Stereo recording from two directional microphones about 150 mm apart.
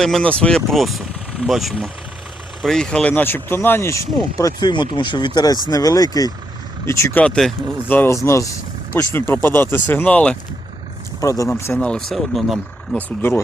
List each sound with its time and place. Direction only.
0.0 s speech: 5° left (ahead or behind)
11.2 s speech: 20° left (ahead or behind); by 13.0 s centre (ahead or behind)
13.0 s speech: 10° left (ahead or behind)